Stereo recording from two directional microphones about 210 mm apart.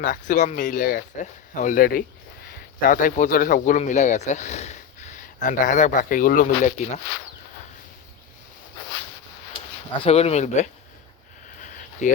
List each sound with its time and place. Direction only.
0.0 s speech: 40° left (ahead or behind)
10.0 s speech: 30° left (ahead or behind)
11.6 s a sound: 35° left (ahead or behind)